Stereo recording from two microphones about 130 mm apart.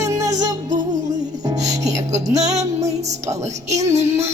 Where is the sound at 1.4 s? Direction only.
25° right (ahead or behind).